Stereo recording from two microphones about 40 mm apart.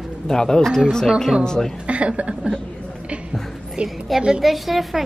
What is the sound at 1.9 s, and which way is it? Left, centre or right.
Speech, right.